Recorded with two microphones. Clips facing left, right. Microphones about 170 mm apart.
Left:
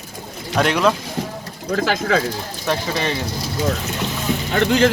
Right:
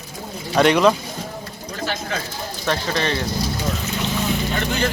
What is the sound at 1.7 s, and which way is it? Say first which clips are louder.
Speech: left 8 dB; 90° left.